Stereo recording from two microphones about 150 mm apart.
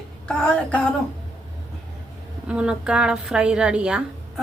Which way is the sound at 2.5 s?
5° right (ahead or behind).